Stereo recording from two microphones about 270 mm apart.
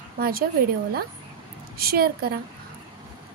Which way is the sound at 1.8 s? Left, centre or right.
Right.